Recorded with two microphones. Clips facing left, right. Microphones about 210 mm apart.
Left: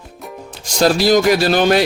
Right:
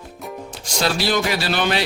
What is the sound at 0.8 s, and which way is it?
A man's voice, 45° left (ahead or behind).